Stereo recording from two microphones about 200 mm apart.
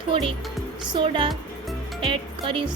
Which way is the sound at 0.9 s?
25° right (ahead or behind).